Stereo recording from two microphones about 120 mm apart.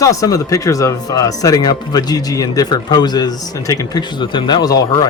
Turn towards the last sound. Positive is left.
turn(degrees=30)  # may be behind; listen again after turning